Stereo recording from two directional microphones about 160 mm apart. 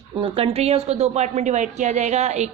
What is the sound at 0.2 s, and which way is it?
A woman's voice, 35° right (ahead or behind).